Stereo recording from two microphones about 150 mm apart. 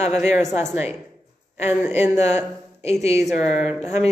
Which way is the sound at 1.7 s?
15° right (ahead or behind).